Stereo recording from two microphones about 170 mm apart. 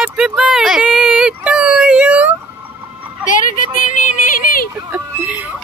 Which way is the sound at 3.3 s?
50° left (ahead or behind).